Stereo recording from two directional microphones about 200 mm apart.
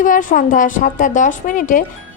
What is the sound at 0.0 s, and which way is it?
A woman's voice, 40° left (ahead or behind).